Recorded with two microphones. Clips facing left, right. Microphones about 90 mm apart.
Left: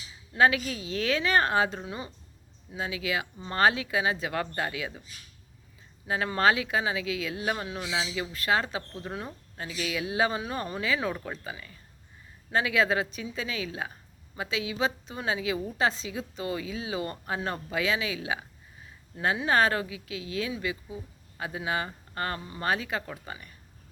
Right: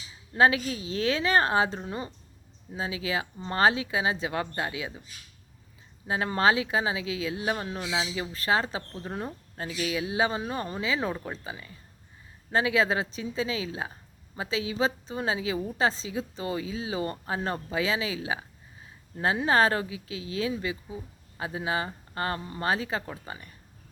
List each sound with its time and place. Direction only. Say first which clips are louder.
0.3 s a woman's voice: right 1 dB; 30° right (ahead or behind)
6.1 s a woman's voice: even; 30° right (ahead or behind)